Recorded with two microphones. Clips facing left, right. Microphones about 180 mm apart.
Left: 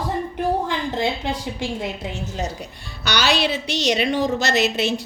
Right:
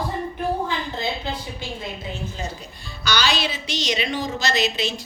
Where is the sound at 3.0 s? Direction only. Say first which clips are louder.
Left 3 dB; 65° left (ahead or behind).